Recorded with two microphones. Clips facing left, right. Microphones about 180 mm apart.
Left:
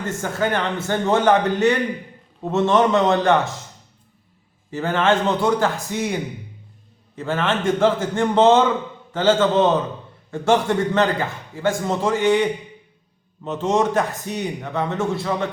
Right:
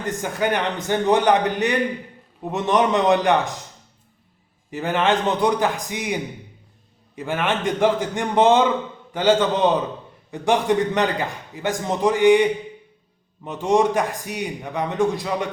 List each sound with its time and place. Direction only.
0.0 s a man's voice: 15° right (ahead or behind)
4.7 s a man's voice: 15° right (ahead or behind)
7.2 s a man's voice: 15° right (ahead or behind)